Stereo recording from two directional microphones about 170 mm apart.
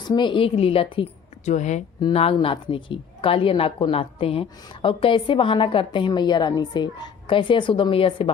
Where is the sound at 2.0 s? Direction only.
30° left (ahead or behind).